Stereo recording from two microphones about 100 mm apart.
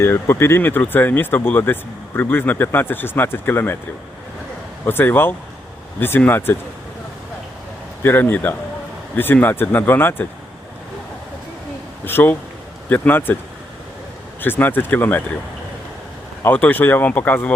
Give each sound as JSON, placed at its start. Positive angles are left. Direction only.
{"t": 0.0, "sound": "speech", "side_deg": 25}
{"t": 4.9, "sound": "speech", "side_deg": 20}
{"t": 8.0, "sound": "speech", "side_deg": 20}
{"t": 12.0, "sound": "speech", "side_deg": 20}
{"t": 14.4, "sound": "speech", "side_deg": 20}
{"t": 16.4, "sound": "speech", "side_deg": 20}